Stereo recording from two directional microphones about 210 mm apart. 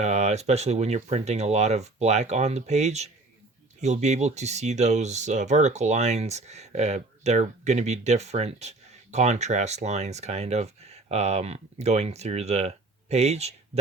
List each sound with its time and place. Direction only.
0.0 s speech: 30° right (ahead or behind)